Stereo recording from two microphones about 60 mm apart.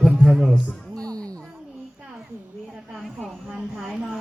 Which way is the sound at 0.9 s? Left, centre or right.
Right.